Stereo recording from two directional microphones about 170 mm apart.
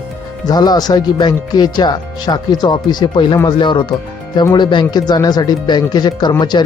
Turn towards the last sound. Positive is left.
turn(degrees=25)  # may be behind; listen again after turning